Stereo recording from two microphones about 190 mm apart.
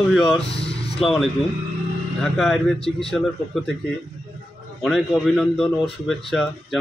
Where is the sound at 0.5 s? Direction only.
30° left (ahead or behind).